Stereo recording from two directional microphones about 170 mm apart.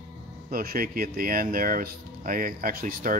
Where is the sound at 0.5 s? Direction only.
60° right (ahead or behind).